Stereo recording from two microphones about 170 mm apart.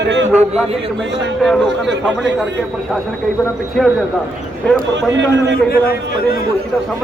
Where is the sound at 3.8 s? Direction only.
5° left (ahead or behind).